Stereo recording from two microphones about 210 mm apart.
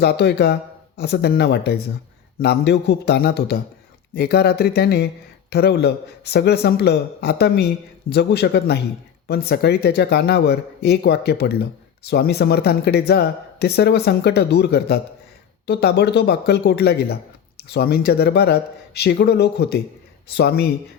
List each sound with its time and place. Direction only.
0.0 s speech: 50° left (ahead or behind)